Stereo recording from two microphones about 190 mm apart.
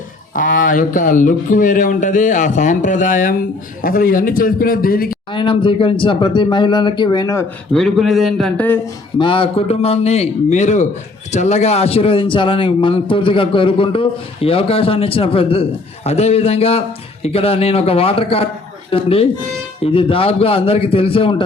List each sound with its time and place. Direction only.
0.3 s speech: 45° left (ahead or behind)
5.3 s a man's voice: 25° left (ahead or behind)
7.7 s a man's voice: centre (ahead or behind)
9.1 s a man's voice: 25° left (ahead or behind)